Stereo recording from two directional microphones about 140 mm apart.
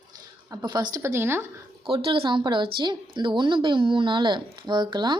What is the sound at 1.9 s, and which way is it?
Speech, 40° right (ahead or behind).